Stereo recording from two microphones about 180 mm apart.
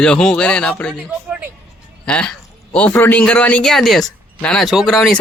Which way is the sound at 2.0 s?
5° left (ahead or behind).